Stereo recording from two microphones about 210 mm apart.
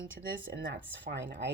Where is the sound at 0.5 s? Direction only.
60° right (ahead or behind).